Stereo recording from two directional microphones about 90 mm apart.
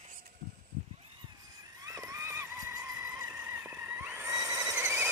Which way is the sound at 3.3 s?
25° right (ahead or behind).